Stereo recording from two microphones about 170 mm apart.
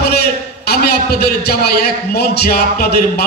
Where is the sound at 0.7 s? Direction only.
65° left (ahead or behind).